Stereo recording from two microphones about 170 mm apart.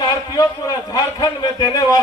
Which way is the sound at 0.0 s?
20° left (ahead or behind).